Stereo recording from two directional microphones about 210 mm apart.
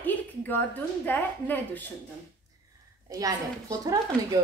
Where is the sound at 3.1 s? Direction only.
15° right (ahead or behind).